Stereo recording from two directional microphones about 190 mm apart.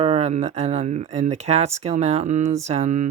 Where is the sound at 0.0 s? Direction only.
35° right (ahead or behind).